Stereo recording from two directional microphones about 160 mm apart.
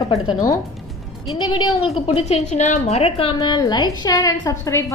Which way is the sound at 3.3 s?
25° left (ahead or behind).